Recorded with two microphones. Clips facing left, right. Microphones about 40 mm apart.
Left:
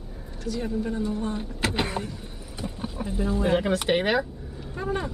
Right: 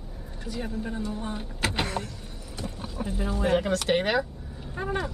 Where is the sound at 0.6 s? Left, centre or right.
Centre.